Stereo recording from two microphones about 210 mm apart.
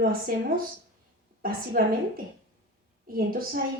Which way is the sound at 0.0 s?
45° right (ahead or behind).